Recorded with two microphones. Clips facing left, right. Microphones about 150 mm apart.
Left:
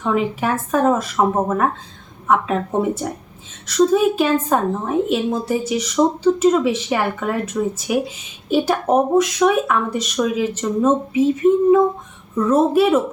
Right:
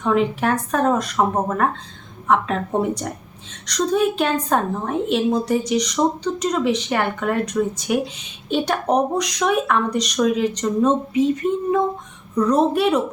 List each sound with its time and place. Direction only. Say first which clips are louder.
0.0 s a woman's voice: right 1 dB; 5° left (ahead or behind)